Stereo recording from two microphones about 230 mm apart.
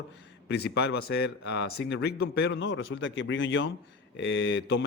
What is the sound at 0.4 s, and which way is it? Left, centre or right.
A man's voice, left.